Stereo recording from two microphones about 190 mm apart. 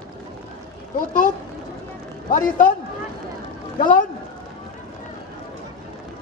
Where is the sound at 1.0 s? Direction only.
45° left (ahead or behind).